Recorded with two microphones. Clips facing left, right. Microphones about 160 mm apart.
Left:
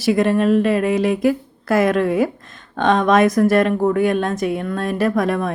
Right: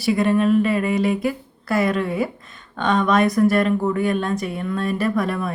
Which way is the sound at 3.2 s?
90° left.